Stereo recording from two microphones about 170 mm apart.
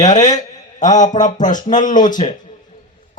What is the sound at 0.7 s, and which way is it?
Speech, 45° left (ahead or behind).